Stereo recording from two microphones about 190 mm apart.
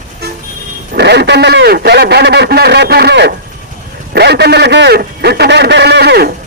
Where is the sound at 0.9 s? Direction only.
60° right (ahead or behind).